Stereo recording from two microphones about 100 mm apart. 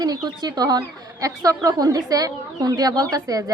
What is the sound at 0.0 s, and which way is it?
A man's voice, 40° right (ahead or behind).